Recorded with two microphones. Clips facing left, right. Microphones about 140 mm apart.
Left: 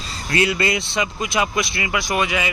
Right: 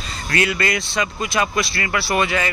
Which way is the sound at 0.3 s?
25° left (ahead or behind).